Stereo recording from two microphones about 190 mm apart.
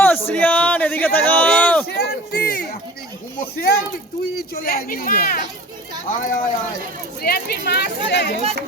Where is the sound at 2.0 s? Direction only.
55° left (ahead or behind).